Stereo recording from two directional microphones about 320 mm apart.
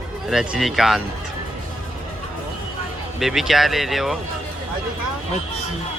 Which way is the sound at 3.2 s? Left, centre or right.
Centre.